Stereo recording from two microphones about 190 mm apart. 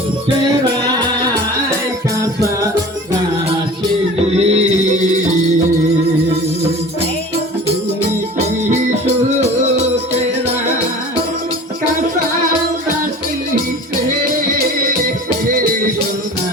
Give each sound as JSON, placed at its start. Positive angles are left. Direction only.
{"t": 4.4, "sound": "music", "side_deg": -35}